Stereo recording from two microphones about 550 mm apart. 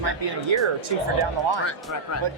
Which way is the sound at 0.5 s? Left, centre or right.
Right.